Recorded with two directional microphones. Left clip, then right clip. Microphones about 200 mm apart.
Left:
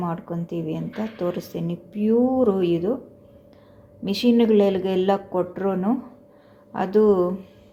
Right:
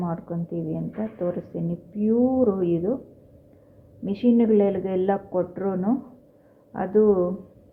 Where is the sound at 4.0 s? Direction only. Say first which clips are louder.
Left 2 dB; 20° left (ahead or behind).